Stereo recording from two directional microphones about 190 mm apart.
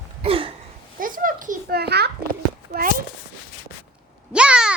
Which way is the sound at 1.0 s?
45° right (ahead or behind).